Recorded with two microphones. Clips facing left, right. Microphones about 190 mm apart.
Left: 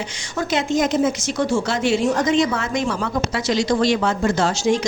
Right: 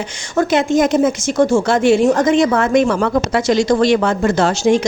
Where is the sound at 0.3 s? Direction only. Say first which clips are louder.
Right 6 dB; 50° right (ahead or behind).